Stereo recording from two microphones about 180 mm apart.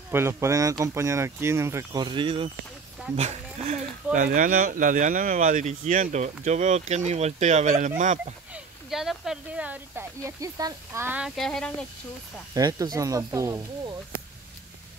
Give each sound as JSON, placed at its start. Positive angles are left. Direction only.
{"t": 0.1, "sound": "speech", "side_deg": -15}
{"t": 3.2, "sound": "speech", "side_deg": -40}
{"t": 8.5, "sound": "speech", "side_deg": 0}
{"t": 12.5, "sound": "speech", "side_deg": -20}